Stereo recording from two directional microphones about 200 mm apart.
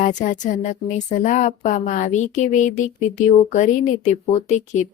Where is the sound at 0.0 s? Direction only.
40° left (ahead or behind).